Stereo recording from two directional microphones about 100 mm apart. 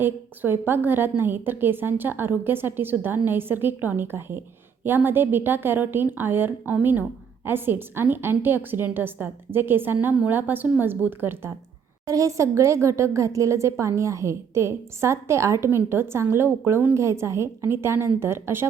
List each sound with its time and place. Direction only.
0.0 s a woman's voice: 20° right (ahead or behind)
12.0 s a woman's voice: 35° right (ahead or behind)